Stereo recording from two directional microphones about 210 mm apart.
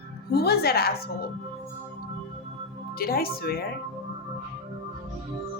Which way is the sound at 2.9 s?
45° left (ahead or behind).